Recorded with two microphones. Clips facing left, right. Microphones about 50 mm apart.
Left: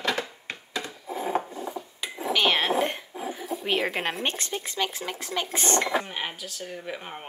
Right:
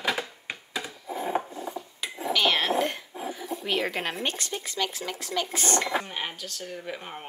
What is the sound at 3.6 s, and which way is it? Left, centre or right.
Speech, centre.